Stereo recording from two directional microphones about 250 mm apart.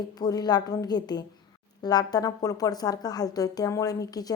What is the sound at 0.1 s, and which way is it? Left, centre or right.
A woman's voice, centre.